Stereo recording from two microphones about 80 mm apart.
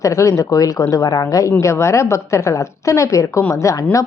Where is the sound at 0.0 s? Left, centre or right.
Left.